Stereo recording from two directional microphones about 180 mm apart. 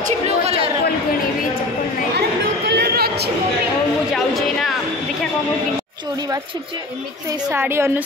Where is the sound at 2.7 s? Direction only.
65° right (ahead or behind).